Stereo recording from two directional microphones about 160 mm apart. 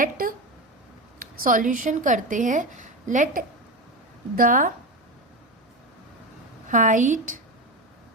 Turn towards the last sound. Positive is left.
turn(degrees=-55)  # may be behind; listen again after turning